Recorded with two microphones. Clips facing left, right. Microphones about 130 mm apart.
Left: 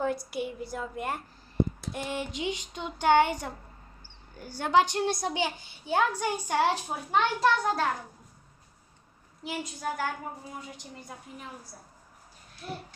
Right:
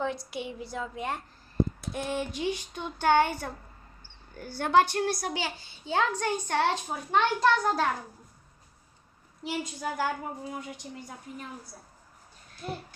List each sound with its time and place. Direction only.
0.0 s a woman's voice: 5° left (ahead or behind)
9.4 s speech: centre (ahead or behind)